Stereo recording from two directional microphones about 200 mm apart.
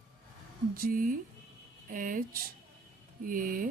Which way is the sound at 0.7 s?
45° right (ahead or behind).